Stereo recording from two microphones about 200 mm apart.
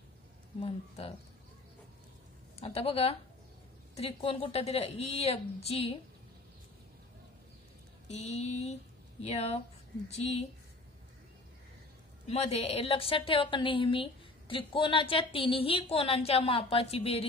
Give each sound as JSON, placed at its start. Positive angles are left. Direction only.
{"t": 0.6, "sound": "a woman's voice", "side_deg": 25}
{"t": 2.6, "sound": "a woman's voice", "side_deg": 30}
{"t": 8.1, "sound": "mantra", "side_deg": 30}
{"t": 12.3, "sound": "a woman's voice", "side_deg": 30}